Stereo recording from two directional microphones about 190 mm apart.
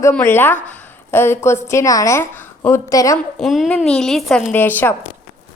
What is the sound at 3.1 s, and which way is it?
A woman's voice, 5° left (ahead or behind).